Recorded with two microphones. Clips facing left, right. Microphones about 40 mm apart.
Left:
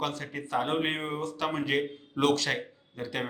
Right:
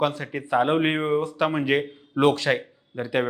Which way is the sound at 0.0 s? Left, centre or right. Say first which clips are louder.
Right 8 dB; centre.